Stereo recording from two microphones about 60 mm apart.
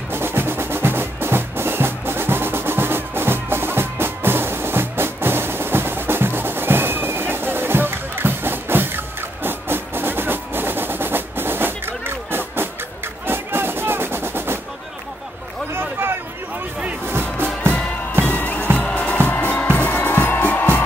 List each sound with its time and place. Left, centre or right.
0.1 s music: right
15.7 s a sound: right
17.0 s music: right
18.2 s music: left